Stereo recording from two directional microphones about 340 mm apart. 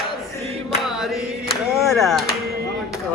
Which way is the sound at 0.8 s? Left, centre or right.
Centre.